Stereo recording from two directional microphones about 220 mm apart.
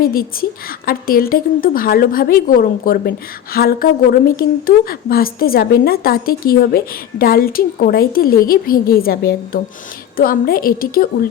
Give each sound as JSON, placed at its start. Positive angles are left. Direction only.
{"t": 0.0, "sound": "a woman's voice", "side_deg": 40}